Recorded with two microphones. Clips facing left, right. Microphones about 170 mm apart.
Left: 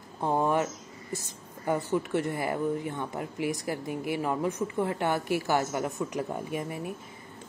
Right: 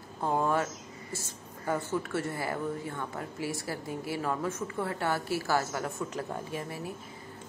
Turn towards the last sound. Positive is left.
turn(degrees=15)  # may be behind; listen again after turning